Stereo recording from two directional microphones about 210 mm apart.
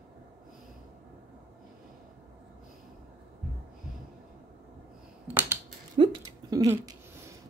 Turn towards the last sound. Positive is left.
turn(degrees=-15)  # may be behind; listen again after turning